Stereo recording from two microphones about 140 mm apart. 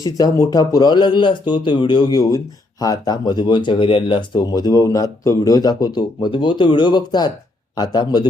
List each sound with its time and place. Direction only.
0.0 s speech: 25° left (ahead or behind)